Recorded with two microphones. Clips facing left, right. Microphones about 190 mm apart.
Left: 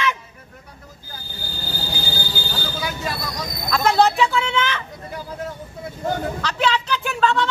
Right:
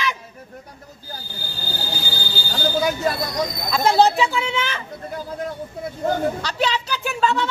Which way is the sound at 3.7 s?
30° right (ahead or behind).